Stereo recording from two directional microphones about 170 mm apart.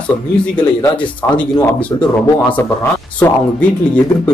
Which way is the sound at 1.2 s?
10° left (ahead or behind).